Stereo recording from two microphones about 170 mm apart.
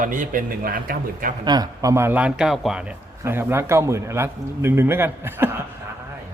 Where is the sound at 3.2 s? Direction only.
15° right (ahead or behind).